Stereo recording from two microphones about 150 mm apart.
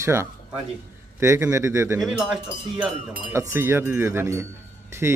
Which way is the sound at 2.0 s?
5° right (ahead or behind).